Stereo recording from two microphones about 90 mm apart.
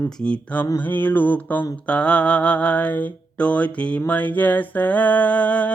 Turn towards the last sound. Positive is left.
turn(degrees=15)  # may be behind; listen again after turning